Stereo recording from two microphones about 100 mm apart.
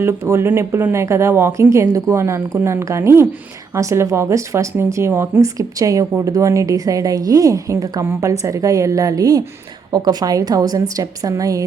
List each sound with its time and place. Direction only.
0.0 s speech: 25° right (ahead or behind)
5.5 s a woman's voice: 35° right (ahead or behind)